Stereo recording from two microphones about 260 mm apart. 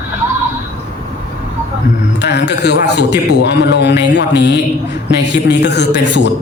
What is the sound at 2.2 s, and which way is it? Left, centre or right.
A man's voice, left.